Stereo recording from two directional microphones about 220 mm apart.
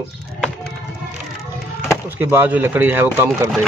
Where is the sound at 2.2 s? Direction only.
10° right (ahead or behind).